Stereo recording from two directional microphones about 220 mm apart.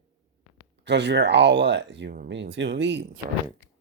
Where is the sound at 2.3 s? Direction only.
55° right (ahead or behind).